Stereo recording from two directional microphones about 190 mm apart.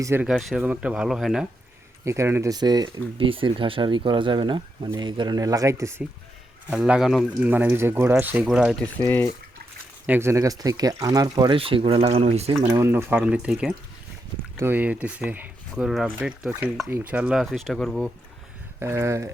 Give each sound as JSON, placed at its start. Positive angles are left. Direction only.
{"t": 0.0, "sound": "speech", "side_deg": -10}
{"t": 2.0, "sound": "speech", "side_deg": -15}
{"t": 10.1, "sound": "speech", "side_deg": -15}
{"t": 12.6, "sound": "speech", "side_deg": -15}
{"t": 18.8, "sound": "speech", "side_deg": -15}